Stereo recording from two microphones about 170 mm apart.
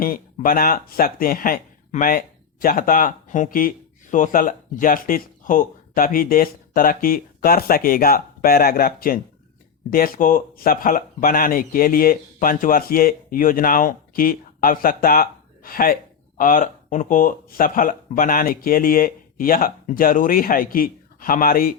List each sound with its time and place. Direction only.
0.0 s speech: 55° left (ahead or behind)